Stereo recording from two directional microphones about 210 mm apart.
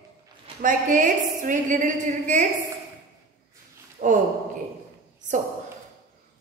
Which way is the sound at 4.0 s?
40° right (ahead or behind).